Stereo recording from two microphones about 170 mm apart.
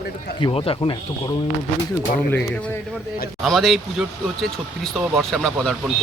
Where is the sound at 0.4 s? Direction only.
35° left (ahead or behind).